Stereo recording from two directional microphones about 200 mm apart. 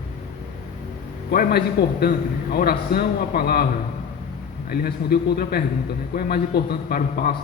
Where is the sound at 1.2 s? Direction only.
50° left (ahead or behind).